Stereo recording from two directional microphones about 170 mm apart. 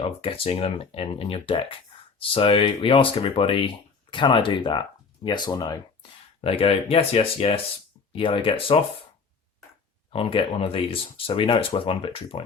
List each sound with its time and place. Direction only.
0.0 s speech: 30° left (ahead or behind)
10.1 s speech: 30° left (ahead or behind)